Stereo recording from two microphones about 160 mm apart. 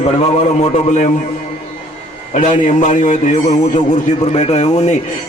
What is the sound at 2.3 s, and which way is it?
A man's voice, 50° left (ahead or behind).